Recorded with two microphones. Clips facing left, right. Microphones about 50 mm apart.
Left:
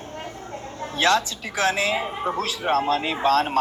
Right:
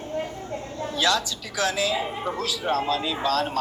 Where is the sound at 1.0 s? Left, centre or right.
Left.